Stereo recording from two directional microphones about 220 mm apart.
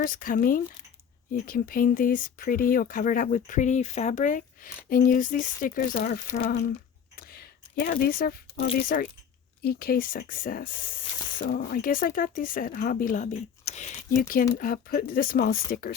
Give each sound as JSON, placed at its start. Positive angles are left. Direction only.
{"t": 0.0, "sound": "speech", "side_deg": 40}
{"t": 7.2, "sound": "a sound", "side_deg": 45}
{"t": 8.9, "sound": "speech", "side_deg": 40}